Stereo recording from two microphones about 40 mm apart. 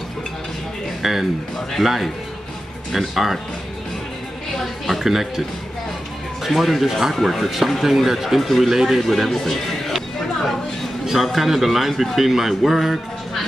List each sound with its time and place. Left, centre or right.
1.0 s speech: centre
4.6 s speech: centre
6.4 s speech: centre
11.2 s speech: centre